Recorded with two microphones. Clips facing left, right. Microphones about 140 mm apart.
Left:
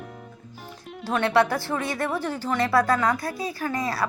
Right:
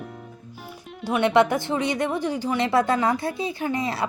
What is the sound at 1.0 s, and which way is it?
A woman's voice, 15° right (ahead or behind).